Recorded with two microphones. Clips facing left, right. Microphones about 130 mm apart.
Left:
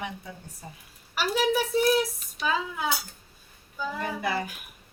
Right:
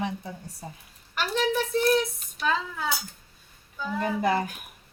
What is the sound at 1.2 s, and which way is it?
A woman's voice, 10° left (ahead or behind).